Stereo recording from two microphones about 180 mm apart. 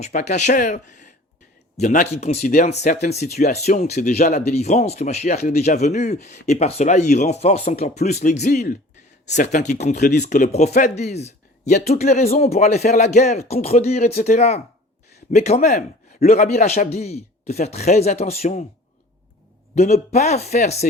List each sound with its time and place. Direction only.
0.0 s speech: 40° left (ahead or behind)
19.7 s speech: 40° left (ahead or behind)